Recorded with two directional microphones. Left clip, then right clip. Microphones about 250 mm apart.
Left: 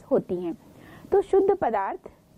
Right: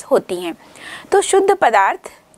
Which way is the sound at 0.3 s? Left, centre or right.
Centre.